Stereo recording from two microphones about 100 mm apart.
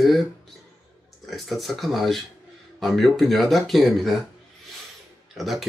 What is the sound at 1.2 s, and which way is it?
Speech, centre (ahead or behind).